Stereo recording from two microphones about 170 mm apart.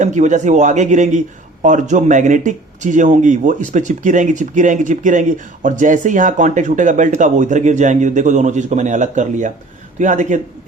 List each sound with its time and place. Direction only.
0.0 s speech: 45° right (ahead or behind)